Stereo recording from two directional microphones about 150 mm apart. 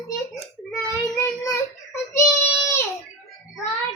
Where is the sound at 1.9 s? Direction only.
20° left (ahead or behind).